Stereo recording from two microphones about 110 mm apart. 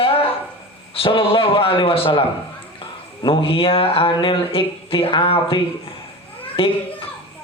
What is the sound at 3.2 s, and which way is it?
A man's voice, 55° left (ahead or behind).